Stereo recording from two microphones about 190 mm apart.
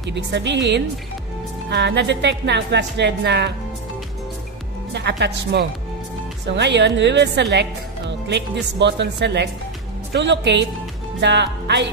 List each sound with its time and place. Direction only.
0.0 s a woman's voice: 70° right (ahead or behind)
4.9 s a woman's voice: 65° right (ahead or behind)